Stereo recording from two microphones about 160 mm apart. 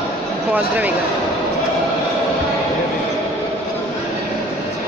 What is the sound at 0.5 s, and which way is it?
Speech, 10° right (ahead or behind).